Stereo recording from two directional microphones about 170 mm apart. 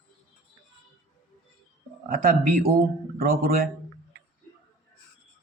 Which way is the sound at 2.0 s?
55° right (ahead or behind).